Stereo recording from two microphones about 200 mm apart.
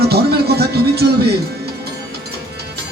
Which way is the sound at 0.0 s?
55° right (ahead or behind).